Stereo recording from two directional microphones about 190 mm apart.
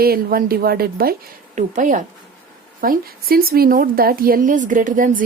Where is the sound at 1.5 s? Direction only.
40° right (ahead or behind).